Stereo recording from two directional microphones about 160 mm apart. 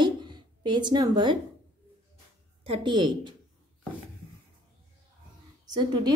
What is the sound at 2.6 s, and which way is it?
Speech, 30° right (ahead or behind).